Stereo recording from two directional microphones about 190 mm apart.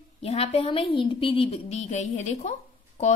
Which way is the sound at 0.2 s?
35° left (ahead or behind).